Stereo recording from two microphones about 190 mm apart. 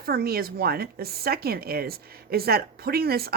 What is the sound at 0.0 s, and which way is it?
Speech, 55° right (ahead or behind).